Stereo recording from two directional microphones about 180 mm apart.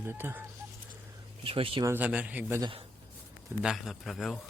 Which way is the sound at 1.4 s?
30° right (ahead or behind).